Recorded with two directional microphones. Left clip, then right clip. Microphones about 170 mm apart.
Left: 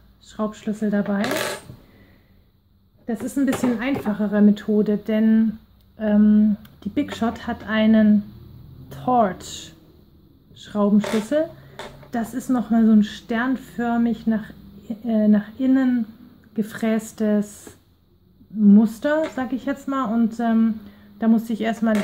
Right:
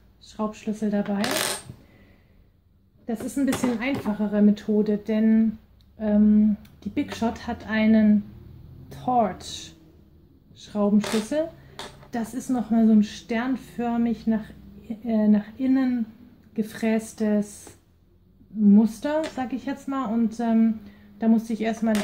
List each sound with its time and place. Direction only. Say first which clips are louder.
0.2 s speech: left 3 dB; 40° left (ahead or behind)
3.1 s speech: left 3 dB; 40° left (ahead or behind)
10.5 s a sound: left 3 dB; 45° left (ahead or behind)
12.1 s a woman's voice: left 4 dB; 40° left (ahead or behind)
18.7 s a woman's voice: left 4 dB; 40° left (ahead or behind)